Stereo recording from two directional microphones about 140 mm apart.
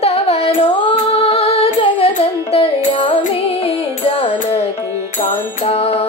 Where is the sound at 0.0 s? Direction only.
45° left (ahead or behind).